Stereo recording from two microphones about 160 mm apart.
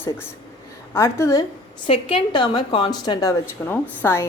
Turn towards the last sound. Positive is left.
turn(degrees=15)  # may be behind; listen again after turning